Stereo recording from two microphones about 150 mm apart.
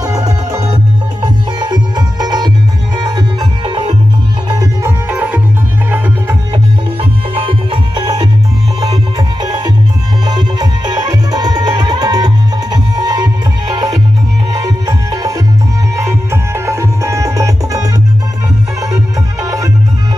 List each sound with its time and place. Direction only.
0.0 s music: 25° right (ahead or behind)
3.0 s tabla: 30° right (ahead or behind)
5.1 s music: 10° right (ahead or behind)
7.4 s music: 30° right (ahead or behind)
10.2 s music: 25° right (ahead or behind)